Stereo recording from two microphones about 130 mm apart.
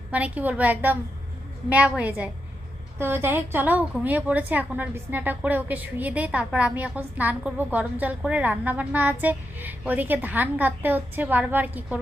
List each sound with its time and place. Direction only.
0.1 s a woman's voice: 10° right (ahead or behind)